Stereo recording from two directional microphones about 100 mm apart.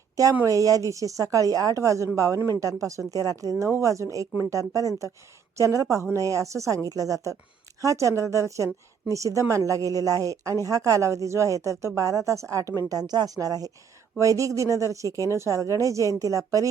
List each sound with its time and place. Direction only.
0.4 s a woman's voice: 35° right (ahead or behind)
12.9 s a woman's voice: 40° right (ahead or behind)